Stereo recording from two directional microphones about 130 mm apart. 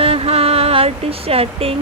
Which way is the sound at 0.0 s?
50° right (ahead or behind).